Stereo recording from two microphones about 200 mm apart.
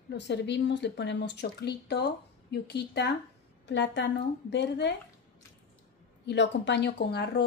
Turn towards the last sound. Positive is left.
turn(degrees=55)  # may be behind; listen again after turning